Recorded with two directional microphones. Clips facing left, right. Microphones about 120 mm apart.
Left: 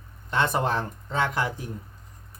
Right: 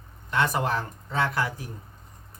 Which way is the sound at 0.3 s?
25° left (ahead or behind).